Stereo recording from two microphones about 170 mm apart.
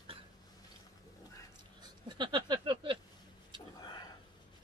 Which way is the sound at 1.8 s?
25° right (ahead or behind).